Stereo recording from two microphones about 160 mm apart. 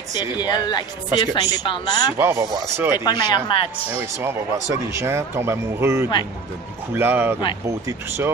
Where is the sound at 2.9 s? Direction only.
25° left (ahead or behind).